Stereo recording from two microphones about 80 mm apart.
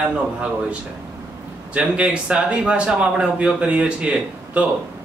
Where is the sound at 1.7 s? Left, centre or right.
Centre.